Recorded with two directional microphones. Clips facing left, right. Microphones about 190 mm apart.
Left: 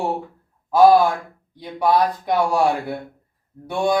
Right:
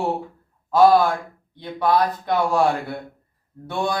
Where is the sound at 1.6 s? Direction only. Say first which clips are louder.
Left 1 dB; 10° left (ahead or behind).